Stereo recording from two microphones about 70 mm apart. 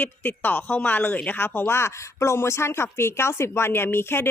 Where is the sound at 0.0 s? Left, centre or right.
Left.